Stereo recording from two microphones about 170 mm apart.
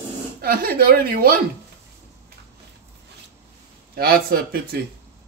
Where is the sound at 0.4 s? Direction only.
60° right (ahead or behind).